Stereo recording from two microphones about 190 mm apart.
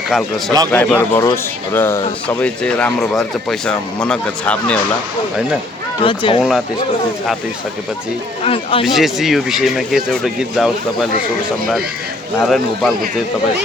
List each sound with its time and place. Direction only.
0.1 s speech: centre (ahead or behind)
6.0 s speech: 25° left (ahead or behind)
8.4 s speech: 30° left (ahead or behind)
8.8 s speech: centre (ahead or behind)
12.4 s speech: centre (ahead or behind)